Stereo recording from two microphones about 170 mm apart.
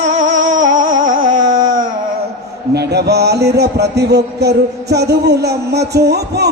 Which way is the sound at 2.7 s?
75° right (ahead or behind).